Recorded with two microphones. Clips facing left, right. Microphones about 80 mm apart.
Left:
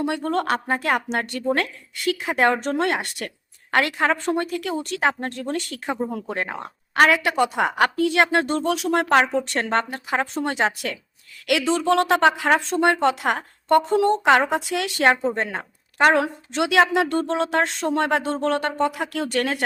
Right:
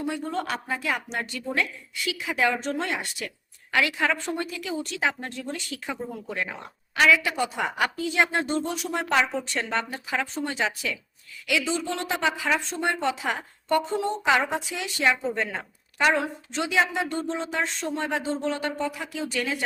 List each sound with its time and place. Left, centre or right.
0.0 s a woman's voice: left
15.2 s a woman's voice: left
16.1 s a woman's voice: left